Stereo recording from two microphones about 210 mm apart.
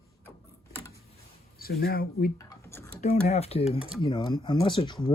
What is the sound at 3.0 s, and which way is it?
Speech, 30° left (ahead or behind).